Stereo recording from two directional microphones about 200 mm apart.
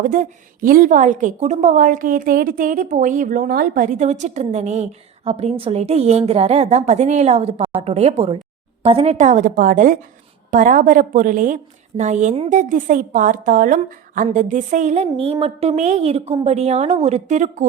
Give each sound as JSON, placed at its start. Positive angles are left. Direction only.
{"t": 0.0, "sound": "a woman's voice", "side_deg": -40}